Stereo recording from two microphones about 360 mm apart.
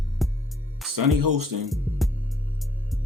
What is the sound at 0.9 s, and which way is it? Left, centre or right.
Speech, right.